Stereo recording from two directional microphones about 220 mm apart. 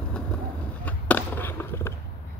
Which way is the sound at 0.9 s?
10° left (ahead or behind).